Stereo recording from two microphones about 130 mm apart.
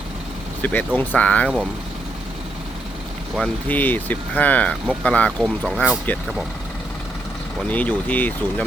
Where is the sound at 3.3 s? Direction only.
10° left (ahead or behind).